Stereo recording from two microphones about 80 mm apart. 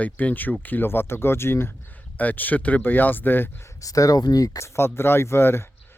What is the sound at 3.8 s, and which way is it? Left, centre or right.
Speech, left.